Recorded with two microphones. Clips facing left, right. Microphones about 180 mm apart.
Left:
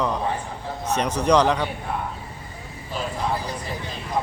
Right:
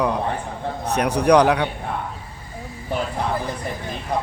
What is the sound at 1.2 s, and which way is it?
Speech, 10° right (ahead or behind).